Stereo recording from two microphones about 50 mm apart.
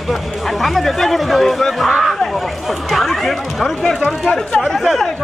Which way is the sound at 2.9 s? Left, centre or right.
Centre.